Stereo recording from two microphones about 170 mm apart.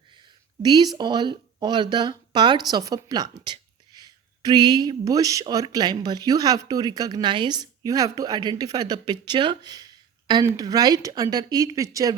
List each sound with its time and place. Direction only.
0.6 s a woman's voice: 25° right (ahead or behind)